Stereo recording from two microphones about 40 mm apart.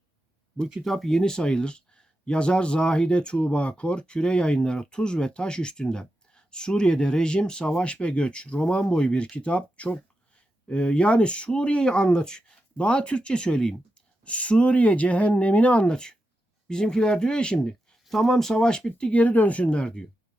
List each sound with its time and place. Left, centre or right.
0.8 s speech: centre
1.1 s speech: centre
14.3 s speech: left
15.9 s speech: centre
18.0 s speech: centre
19.1 s speech: left